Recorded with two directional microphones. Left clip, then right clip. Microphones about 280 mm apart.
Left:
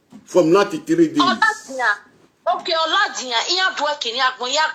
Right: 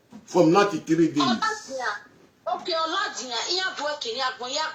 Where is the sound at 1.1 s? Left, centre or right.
Left.